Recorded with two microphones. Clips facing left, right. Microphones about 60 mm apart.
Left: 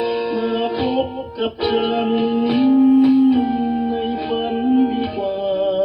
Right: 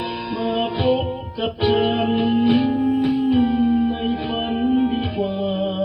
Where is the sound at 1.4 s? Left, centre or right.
Left.